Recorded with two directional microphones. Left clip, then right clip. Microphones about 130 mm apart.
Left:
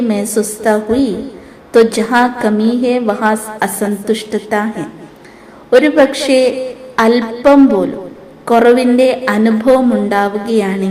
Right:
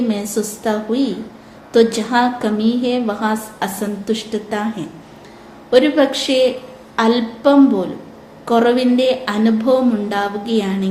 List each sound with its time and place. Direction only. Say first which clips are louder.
0.1 s a woman's voice: left 6 dB; 40° left (ahead or behind)
5.7 s a woman's voice: left 4 dB; 35° left (ahead or behind)